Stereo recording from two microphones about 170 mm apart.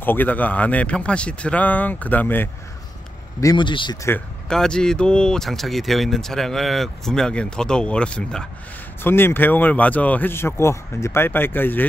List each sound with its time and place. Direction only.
0.0 s speech: 10° left (ahead or behind)
3.3 s speech: 25° left (ahead or behind)
4.5 s speech: 5° left (ahead or behind)